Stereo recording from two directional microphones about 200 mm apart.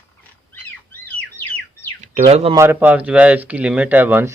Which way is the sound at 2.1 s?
35° right (ahead or behind).